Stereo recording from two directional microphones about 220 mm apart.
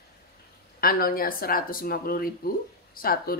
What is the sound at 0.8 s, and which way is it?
Speech, 40° left (ahead or behind).